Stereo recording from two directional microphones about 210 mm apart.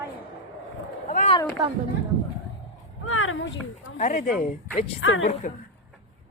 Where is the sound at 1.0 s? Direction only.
35° left (ahead or behind).